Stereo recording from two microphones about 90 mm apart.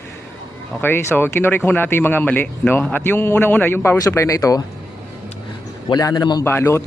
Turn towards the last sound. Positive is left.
turn(degrees=30)  # may be behind; listen again after turning